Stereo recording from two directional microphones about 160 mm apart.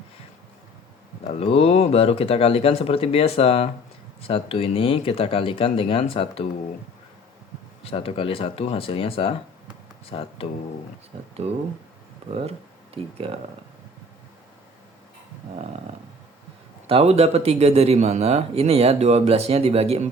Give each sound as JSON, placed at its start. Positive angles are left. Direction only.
{"t": 1.3, "sound": "speech", "side_deg": 40}
{"t": 7.9, "sound": "speech", "side_deg": 35}
{"t": 11.4, "sound": "a man's voice", "side_deg": -40}
{"t": 16.8, "sound": "a man's voice", "side_deg": -40}